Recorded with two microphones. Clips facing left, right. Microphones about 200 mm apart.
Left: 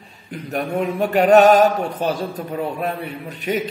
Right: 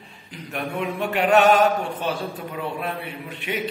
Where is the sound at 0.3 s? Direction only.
45° left (ahead or behind).